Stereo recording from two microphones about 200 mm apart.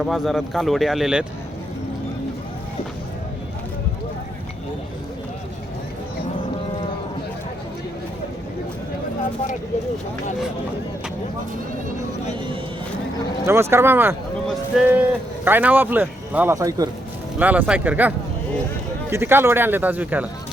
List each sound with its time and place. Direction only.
0.0 s speech: centre (ahead or behind)
13.4 s speech: 15° right (ahead or behind)
19.1 s speech: 10° right (ahead or behind)